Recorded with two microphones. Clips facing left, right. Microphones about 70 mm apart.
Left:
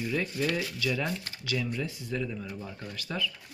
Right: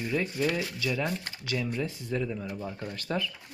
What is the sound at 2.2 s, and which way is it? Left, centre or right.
Speech, centre.